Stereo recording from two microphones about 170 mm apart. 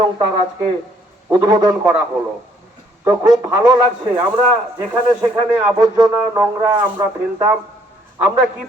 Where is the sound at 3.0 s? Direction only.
15° right (ahead or behind).